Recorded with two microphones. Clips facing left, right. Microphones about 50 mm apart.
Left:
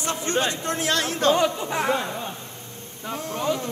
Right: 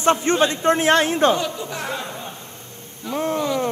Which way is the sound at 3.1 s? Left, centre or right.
Right.